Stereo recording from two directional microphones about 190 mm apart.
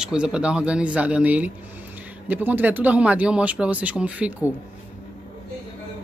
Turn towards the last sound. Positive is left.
turn(degrees=-5)  # may be behind; listen again after turning